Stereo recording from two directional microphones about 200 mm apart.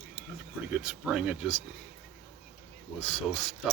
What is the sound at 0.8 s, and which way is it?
Speech, 5° right (ahead or behind).